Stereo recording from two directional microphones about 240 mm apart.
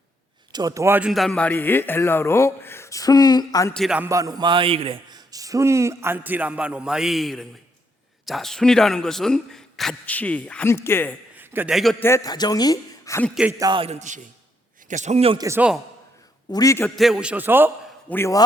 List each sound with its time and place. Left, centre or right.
0.5 s a man's voice: centre
3.8 s a man's voice: centre
11.3 s speech: centre
13.3 s a man's voice: centre
15.4 s a man's voice: centre
16.5 s a man's voice: centre
17.0 s speech: centre
18.1 s a man's voice: centre